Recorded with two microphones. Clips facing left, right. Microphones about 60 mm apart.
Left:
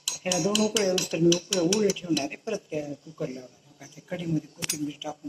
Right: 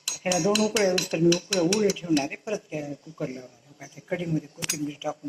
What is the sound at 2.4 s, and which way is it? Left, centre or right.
Speech, centre.